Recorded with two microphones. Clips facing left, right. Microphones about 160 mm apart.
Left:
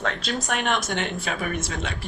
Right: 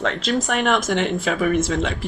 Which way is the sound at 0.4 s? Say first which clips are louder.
Right 3 dB; 85° right.